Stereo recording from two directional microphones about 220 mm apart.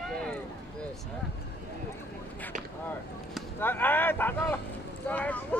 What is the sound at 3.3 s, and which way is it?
Speech, 10° left (ahead or behind).